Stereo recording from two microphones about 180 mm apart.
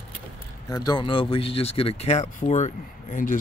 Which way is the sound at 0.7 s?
20° left (ahead or behind).